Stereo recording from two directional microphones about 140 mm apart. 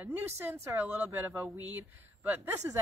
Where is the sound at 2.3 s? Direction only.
15° right (ahead or behind).